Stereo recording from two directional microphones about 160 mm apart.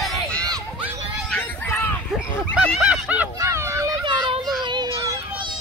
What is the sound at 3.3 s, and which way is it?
Children playing, 20° right (ahead or behind).